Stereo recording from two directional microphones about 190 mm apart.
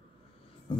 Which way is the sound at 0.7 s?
25° left (ahead or behind).